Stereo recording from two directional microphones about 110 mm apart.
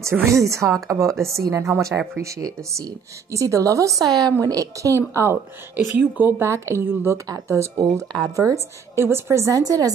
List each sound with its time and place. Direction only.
0.3 s a woman's voice: 30° right (ahead or behind)
1.1 s speech: centre (ahead or behind)
1.5 s a woman's voice: 25° right (ahead or behind)
7.8 s speech: 35° right (ahead or behind)
8.9 s a woman's voice: 25° right (ahead or behind)